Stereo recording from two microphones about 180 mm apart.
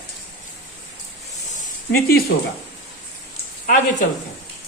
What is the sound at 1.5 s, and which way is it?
Snake, 55° left (ahead or behind).